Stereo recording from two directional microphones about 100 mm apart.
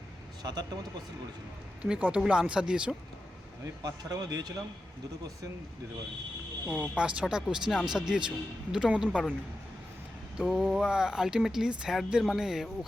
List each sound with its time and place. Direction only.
0.4 s speech: 40° right (ahead or behind)
1.8 s speech: 15° right (ahead or behind)
3.8 s speech: 40° right (ahead or behind)
6.7 s speech: 10° right (ahead or behind)
10.3 s speech: 5° right (ahead or behind)